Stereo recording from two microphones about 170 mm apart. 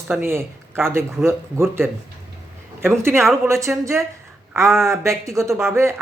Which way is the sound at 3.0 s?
15° right (ahead or behind).